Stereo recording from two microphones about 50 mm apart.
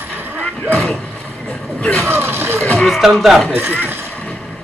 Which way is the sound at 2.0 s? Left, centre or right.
Right.